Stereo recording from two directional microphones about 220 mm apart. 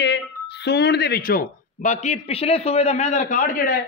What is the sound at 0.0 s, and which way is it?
Speech, 50° left (ahead or behind).